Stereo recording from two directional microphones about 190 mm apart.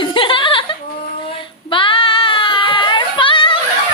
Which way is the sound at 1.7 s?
25° left (ahead or behind).